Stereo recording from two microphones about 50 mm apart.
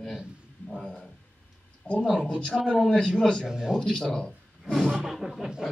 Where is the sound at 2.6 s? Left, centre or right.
Centre.